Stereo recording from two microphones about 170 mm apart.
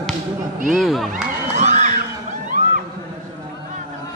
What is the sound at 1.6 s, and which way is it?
Music, 40° right (ahead or behind).